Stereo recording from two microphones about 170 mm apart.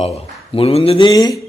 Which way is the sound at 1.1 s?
20° left (ahead or behind).